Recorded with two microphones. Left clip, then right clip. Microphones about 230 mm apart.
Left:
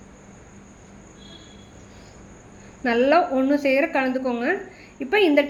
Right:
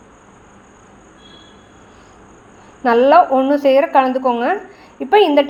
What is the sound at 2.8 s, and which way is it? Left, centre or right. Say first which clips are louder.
A woman's voice: right 8 dB; right.